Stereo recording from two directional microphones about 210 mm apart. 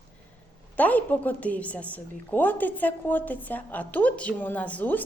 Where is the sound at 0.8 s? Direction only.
10° left (ahead or behind).